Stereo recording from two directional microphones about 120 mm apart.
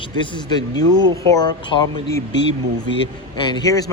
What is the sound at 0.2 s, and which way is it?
Speech, 40° left (ahead or behind).